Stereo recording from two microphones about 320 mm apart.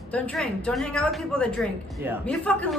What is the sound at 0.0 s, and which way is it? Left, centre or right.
A woman's voice, centre.